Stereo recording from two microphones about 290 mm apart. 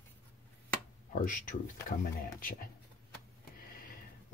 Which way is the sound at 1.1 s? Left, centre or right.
Left.